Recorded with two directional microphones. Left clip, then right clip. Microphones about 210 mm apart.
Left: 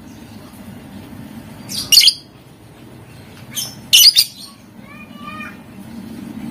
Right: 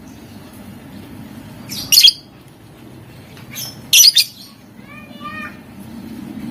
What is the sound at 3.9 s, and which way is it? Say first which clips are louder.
Bird: left 1 dB; 5° left (ahead or behind).